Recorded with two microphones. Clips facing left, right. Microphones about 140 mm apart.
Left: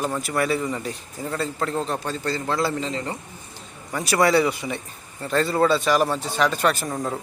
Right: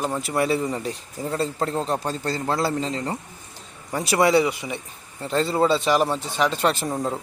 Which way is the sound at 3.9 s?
25° right (ahead or behind).